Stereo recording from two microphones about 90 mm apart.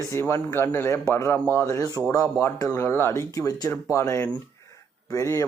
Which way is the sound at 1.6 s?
40° left (ahead or behind).